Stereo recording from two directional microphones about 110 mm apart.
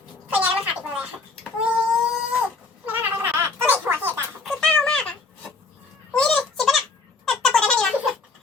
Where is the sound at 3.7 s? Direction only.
20° right (ahead or behind).